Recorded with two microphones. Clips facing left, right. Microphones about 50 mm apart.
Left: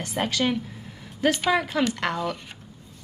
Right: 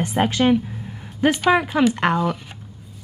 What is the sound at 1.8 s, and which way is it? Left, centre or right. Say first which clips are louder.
Speech: right 7 dB; centre.